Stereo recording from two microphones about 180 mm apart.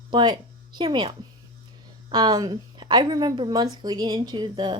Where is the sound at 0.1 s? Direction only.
25° right (ahead or behind).